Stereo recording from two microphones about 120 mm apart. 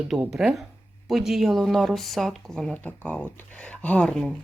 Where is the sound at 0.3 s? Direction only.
5° right (ahead or behind).